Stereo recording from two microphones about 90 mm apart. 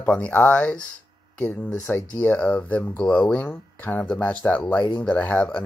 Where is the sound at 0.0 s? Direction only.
15° left (ahead or behind).